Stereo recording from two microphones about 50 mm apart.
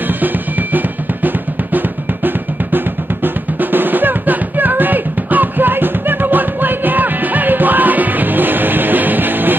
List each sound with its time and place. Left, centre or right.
0.2 s drum: right
3.5 s music: right